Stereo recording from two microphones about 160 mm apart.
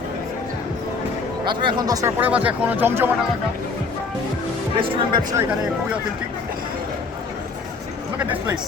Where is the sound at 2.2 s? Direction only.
10° right (ahead or behind).